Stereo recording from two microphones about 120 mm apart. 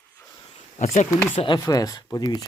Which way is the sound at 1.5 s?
30° left (ahead or behind).